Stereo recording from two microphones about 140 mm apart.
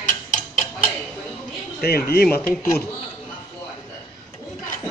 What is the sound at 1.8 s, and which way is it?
Speech, 90° left.